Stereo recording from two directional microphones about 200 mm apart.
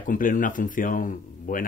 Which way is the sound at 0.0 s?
40° left (ahead or behind).